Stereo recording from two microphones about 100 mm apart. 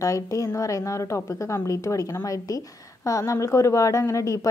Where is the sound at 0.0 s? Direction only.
30° left (ahead or behind).